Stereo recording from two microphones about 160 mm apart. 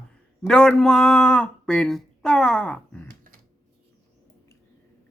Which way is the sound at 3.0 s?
60° right (ahead or behind).